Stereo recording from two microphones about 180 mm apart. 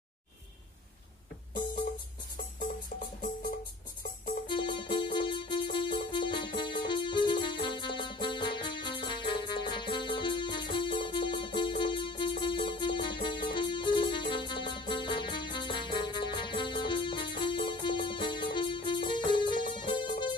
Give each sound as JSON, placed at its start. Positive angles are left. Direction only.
{"t": 4.5, "sound": "music", "side_deg": 25}
{"t": 6.9, "sound": "keyboard", "side_deg": 25}
{"t": 7.6, "sound": "music", "side_deg": 25}